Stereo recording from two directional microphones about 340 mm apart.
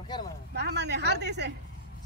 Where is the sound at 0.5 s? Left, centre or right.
Right.